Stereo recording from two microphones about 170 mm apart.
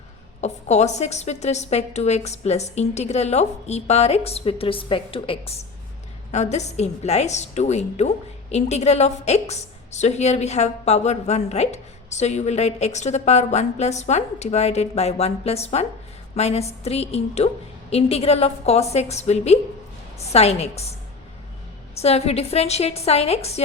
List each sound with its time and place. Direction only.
0.4 s a woman's voice: 40° left (ahead or behind)
21.9 s a woman's voice: 35° left (ahead or behind)